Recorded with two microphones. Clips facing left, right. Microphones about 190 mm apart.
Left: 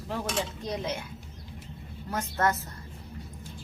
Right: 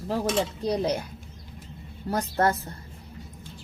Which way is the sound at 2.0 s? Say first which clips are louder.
Right 4 dB; 35° right (ahead or behind).